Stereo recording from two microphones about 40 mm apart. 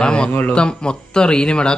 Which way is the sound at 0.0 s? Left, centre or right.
Left.